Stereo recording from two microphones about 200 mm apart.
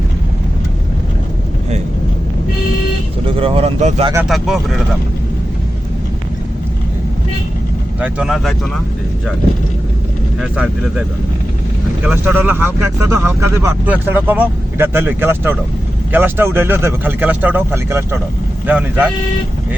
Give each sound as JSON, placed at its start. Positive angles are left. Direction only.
{"t": 3.2, "sound": "speech", "side_deg": -30}
{"t": 4.3, "sound": "speech", "side_deg": 0}
{"t": 8.0, "sound": "speech", "side_deg": -5}
{"t": 10.4, "sound": "speech", "side_deg": -5}
{"t": 12.0, "sound": "speech", "side_deg": -10}